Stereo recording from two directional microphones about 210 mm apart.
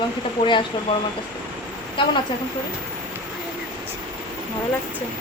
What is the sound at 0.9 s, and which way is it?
Speech, 20° left (ahead or behind).